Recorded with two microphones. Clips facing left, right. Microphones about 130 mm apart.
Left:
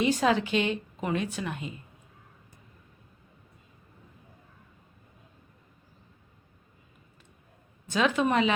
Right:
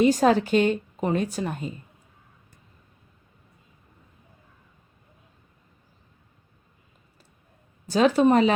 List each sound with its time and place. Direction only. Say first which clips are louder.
0.0 s a woman's voice: right 6 dB; 40° right (ahead or behind)
7.9 s a woman's voice: right 7 dB; 35° right (ahead or behind)